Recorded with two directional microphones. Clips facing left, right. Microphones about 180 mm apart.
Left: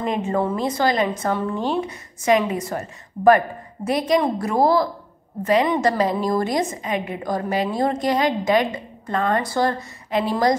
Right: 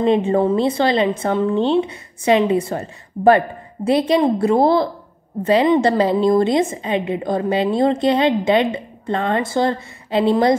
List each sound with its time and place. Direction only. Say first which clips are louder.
0.0 s a woman's voice: right 7 dB; 30° right (ahead or behind)